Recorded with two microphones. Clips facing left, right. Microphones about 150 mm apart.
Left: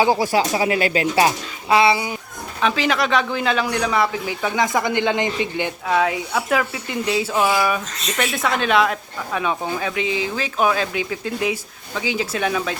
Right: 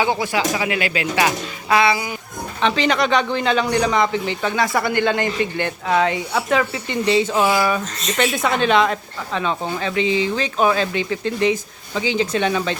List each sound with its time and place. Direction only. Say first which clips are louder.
0.0 s speech: left 3 dB; 40° left (ahead or behind)
2.6 s speech: right 1 dB; 5° left (ahead or behind)
4.5 s a man's voice: even; 15° left (ahead or behind)
5.9 s speech: right 1 dB; centre (ahead or behind)